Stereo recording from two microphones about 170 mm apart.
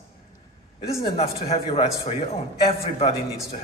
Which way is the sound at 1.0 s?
35° left (ahead or behind).